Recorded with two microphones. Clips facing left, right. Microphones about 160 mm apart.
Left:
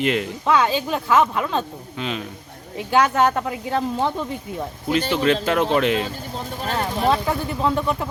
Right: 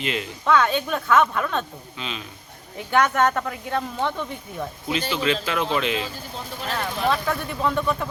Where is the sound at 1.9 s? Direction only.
55° left (ahead or behind).